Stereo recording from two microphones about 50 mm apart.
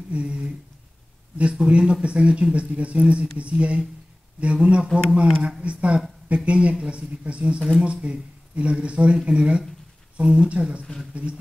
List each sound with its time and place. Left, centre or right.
0.1 s speech: right